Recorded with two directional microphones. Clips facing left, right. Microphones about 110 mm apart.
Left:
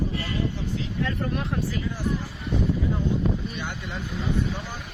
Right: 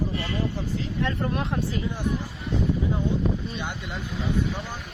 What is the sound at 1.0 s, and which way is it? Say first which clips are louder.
Speech: right 2 dB; 25° right (ahead or behind).